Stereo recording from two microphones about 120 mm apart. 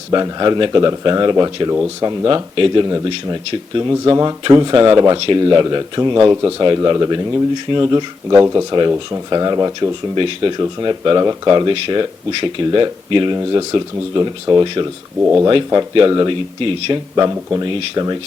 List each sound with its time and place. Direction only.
0.1 s speech: 35° right (ahead or behind)
10.2 s speech: 45° right (ahead or behind)
13.3 s speech: 30° right (ahead or behind)
15.2 s speech: 20° right (ahead or behind)
15.4 s speech: 35° right (ahead or behind)
17.3 s speech: 25° right (ahead or behind)